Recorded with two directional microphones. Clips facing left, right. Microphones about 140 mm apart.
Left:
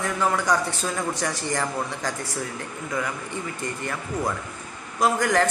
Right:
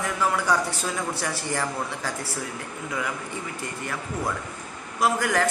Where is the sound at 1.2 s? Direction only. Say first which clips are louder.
Left 2 dB; 5° right (ahead or behind).